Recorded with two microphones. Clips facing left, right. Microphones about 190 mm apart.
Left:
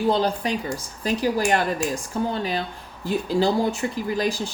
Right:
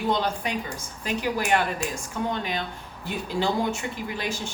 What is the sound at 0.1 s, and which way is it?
Speech, 35° left (ahead or behind).